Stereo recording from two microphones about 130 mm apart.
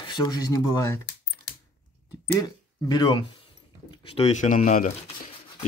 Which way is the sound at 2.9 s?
35° left (ahead or behind).